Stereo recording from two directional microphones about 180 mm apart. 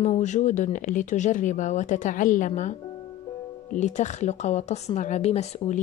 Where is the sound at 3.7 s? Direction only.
40° left (ahead or behind).